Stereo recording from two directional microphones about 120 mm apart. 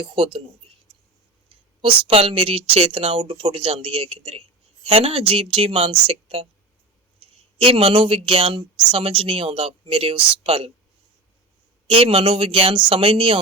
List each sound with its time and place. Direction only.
0.0 s speech: 45° right (ahead or behind)
1.8 s speech: 50° right (ahead or behind)
7.6 s speech: 50° right (ahead or behind)
11.9 s speech: 50° right (ahead or behind)